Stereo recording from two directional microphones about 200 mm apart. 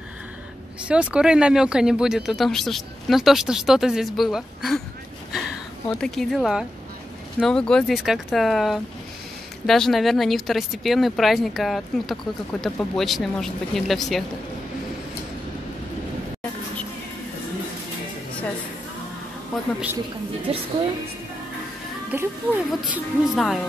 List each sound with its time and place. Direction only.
0.8 s speech: 5° right (ahead or behind)
5.9 s speech: centre (ahead or behind)
19.5 s speech: 5° right (ahead or behind)
20.5 s speech: 30° right (ahead or behind)
22.1 s speech: 10° right (ahead or behind)